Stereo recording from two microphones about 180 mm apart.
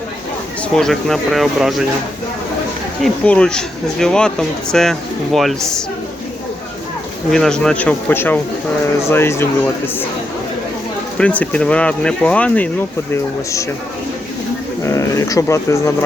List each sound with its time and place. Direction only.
0.8 s speech: centre (ahead or behind)
3.0 s speech: 5° left (ahead or behind)
7.3 s speech: 5° left (ahead or behind)
11.2 s speech: 10° left (ahead or behind)
14.8 s speech: 15° left (ahead or behind)